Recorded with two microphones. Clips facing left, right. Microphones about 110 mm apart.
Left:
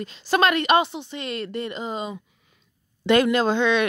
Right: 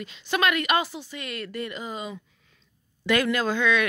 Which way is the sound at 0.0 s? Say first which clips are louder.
Left 4 dB; 35° left (ahead or behind).